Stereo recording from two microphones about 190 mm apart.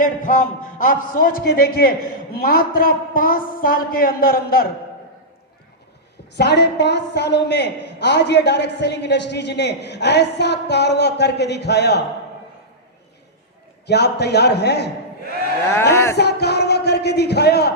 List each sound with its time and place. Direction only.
0.0 s a man's voice: 45° left (ahead or behind)
6.3 s a woman's voice: 60° left (ahead or behind)
13.8 s a woman's voice: 60° left (ahead or behind)
15.6 s speech: 15° left (ahead or behind)
16.1 s a woman's voice: 60° left (ahead or behind)